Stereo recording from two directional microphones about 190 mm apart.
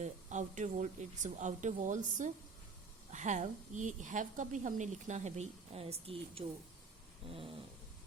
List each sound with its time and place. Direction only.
0.0 s a woman's voice: 40° right (ahead or behind)
7.3 s dog: 30° right (ahead or behind)